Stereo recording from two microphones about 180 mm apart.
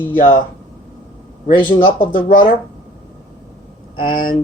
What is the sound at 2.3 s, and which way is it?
Speech, 50° left (ahead or behind).